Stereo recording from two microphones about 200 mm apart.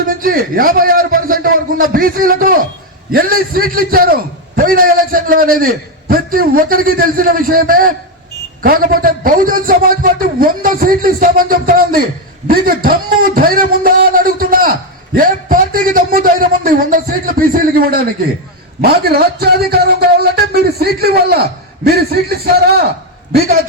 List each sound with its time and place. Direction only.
0.1 s a man's voice: 45° right (ahead or behind)